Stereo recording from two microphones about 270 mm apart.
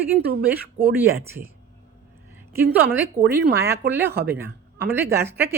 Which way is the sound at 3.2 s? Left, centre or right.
Right.